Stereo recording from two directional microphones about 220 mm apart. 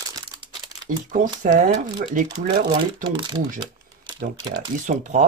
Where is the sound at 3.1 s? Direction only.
20° right (ahead or behind).